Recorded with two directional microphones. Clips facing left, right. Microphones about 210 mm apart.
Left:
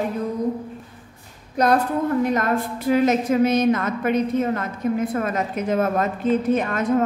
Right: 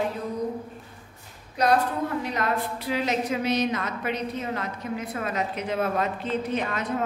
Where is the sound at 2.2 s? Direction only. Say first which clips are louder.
Left 7 dB; 50° left (ahead or behind).